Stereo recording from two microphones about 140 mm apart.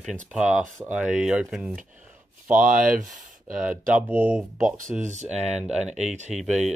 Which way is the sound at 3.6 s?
10° right (ahead or behind).